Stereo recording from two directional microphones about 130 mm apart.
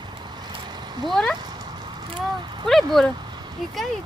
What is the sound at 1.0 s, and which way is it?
Speech, centre (ahead or behind).